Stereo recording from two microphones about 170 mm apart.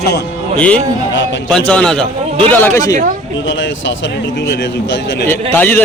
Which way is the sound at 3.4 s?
90° left.